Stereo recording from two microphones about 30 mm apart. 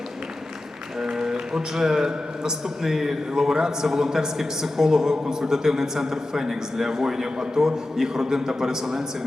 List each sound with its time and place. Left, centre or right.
0.9 s a man's voice: centre